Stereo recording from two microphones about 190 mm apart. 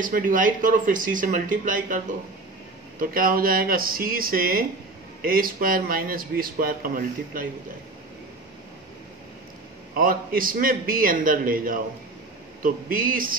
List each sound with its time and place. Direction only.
0.0 s speech: 45° right (ahead or behind)
3.0 s speech: 50° right (ahead or behind)
9.9 s speech: 50° right (ahead or behind)